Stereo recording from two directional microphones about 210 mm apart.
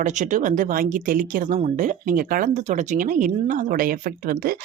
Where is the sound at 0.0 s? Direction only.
35° right (ahead or behind).